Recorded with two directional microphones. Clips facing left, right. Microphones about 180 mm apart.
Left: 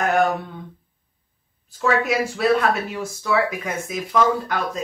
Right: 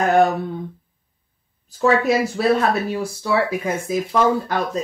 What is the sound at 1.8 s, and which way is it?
Speech, 35° right (ahead or behind).